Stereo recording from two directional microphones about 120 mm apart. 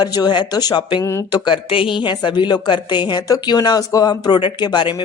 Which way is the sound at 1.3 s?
40° left (ahead or behind).